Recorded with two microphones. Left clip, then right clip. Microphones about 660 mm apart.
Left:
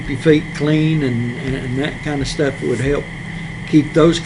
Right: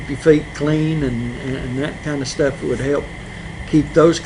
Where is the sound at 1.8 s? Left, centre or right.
Left.